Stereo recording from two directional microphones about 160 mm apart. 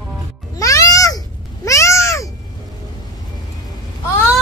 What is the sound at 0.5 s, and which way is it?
Music, 20° left (ahead or behind).